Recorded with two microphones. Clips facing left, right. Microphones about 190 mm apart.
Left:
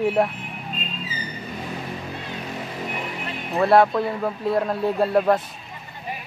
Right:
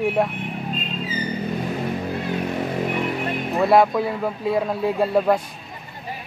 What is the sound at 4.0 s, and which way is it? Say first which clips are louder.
Speech: right 1 dB; centre (ahead or behind).